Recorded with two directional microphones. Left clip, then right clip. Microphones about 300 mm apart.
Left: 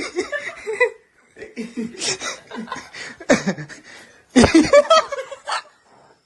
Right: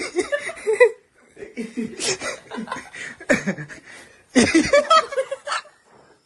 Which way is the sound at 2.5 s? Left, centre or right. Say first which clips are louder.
Right 1 dB; right.